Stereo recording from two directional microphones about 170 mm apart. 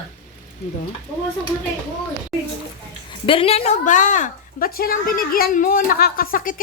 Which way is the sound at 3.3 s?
35° left (ahead or behind).